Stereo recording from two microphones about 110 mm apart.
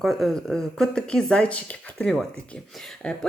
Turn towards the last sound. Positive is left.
turn(degrees=5)  # may be behind; listen again after turning